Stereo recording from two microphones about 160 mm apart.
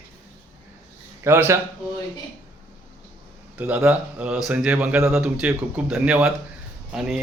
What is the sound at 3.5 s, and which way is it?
A man's voice, 10° right (ahead or behind).